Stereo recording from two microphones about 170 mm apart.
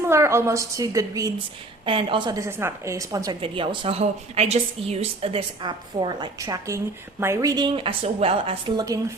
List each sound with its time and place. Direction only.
0.0 s a woman's voice: 15° right (ahead or behind)
1.8 s a woman's voice: 30° right (ahead or behind)
3.4 s a woman's voice: 30° right (ahead or behind)